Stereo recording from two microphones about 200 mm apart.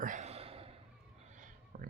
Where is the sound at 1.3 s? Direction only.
40° right (ahead or behind).